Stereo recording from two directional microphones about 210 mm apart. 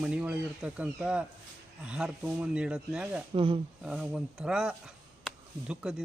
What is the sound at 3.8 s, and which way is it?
Speech, 5° right (ahead or behind).